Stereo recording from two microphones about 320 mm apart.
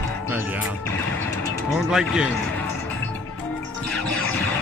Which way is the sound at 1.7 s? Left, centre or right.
Centre.